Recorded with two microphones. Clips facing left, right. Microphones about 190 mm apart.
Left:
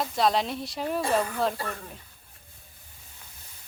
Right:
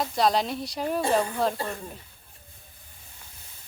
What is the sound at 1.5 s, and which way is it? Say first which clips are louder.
Speech: right 2 dB; 25° right (ahead or behind).